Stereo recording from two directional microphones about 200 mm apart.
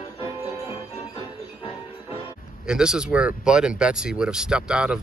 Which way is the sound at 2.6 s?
5° right (ahead or behind).